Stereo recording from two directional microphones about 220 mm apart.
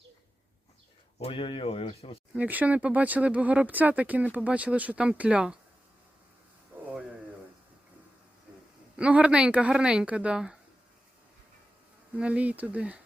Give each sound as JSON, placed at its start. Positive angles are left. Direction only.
{"t": 1.2, "sound": "speech", "side_deg": 25}
{"t": 2.3, "sound": "speech", "side_deg": -5}
{"t": 9.0, "sound": "speech", "side_deg": -5}
{"t": 12.1, "sound": "speech", "side_deg": -5}